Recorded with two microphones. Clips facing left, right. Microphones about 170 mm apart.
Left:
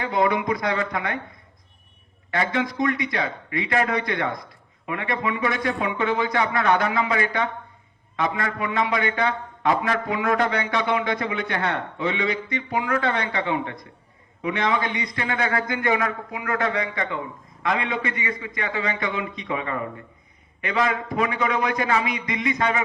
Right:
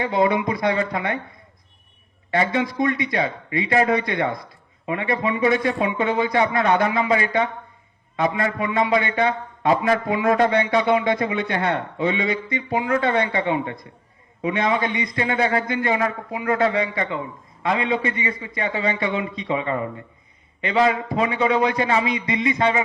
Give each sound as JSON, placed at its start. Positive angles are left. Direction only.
{"t": 0.0, "sound": "a man's voice", "side_deg": -25}
{"t": 2.3, "sound": "a man's voice", "side_deg": -25}